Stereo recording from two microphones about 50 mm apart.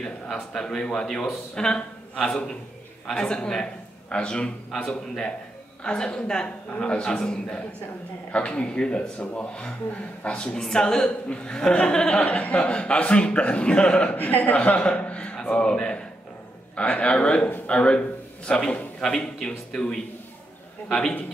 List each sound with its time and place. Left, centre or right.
0.0 s a man's voice: centre
10.6 s speech: centre
14.1 s a man's voice: left; by 21.2 s centre